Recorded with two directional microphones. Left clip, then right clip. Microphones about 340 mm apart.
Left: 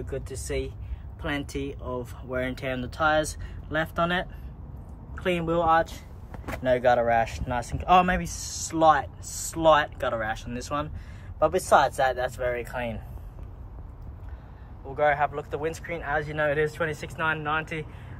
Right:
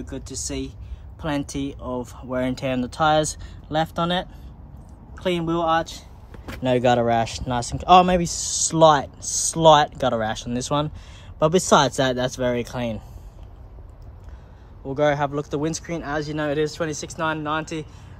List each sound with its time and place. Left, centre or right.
1.2 s speech: centre
15.0 s speech: centre